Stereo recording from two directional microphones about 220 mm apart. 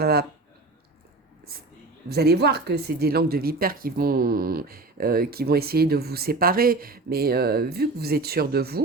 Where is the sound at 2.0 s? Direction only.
45° right (ahead or behind).